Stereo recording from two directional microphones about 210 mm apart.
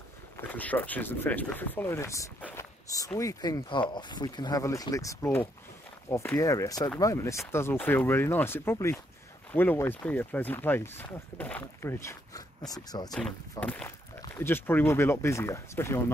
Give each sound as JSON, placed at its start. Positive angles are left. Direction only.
{"t": 0.5, "sound": "speech", "side_deg": 10}
{"t": 13.1, "sound": "speech", "side_deg": 5}